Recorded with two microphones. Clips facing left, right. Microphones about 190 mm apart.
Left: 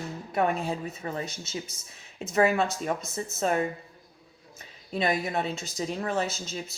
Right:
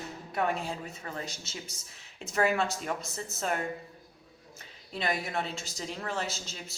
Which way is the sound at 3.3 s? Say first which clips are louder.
Left 6 dB; 20° left (ahead or behind).